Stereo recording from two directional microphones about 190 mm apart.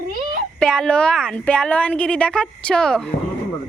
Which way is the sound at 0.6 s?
5° left (ahead or behind).